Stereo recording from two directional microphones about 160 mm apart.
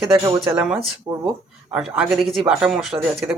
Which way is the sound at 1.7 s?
5° right (ahead or behind).